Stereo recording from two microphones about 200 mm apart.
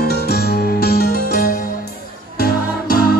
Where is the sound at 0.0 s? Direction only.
50° left (ahead or behind).